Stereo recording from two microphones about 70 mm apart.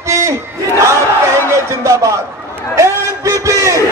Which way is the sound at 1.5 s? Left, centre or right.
Right.